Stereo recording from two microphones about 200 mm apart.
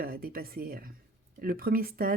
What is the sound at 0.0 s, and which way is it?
Speech, 50° right (ahead or behind).